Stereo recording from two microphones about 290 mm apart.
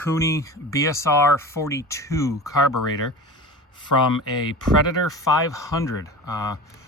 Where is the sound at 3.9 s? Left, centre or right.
Left.